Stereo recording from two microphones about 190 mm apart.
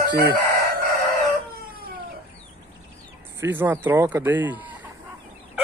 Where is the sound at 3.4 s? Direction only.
10° right (ahead or behind).